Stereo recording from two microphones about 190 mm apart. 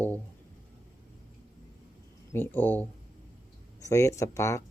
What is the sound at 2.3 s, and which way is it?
Speech, 10° left (ahead or behind).